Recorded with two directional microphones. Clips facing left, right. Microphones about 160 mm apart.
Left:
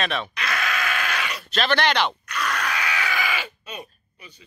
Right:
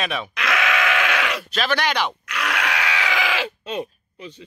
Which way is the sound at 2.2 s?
85° right.